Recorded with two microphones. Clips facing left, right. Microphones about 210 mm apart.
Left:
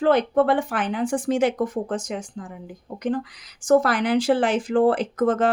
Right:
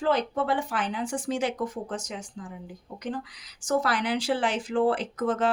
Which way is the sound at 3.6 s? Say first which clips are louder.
Left 8 dB; 50° left (ahead or behind).